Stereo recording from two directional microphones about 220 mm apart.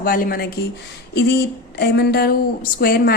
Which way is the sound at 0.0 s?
40° left (ahead or behind).